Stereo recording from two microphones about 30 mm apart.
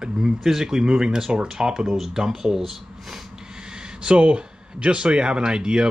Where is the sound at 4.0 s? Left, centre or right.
Right.